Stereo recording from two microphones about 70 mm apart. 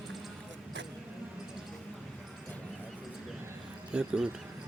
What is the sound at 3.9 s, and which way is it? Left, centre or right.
Speech, centre.